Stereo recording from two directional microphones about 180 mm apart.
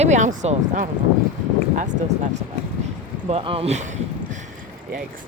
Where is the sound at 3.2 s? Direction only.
30° right (ahead or behind).